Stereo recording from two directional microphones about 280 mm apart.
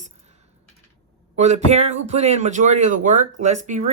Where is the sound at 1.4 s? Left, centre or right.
Right.